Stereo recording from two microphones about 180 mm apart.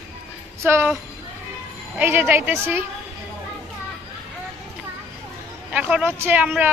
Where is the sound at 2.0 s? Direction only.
10° right (ahead or behind).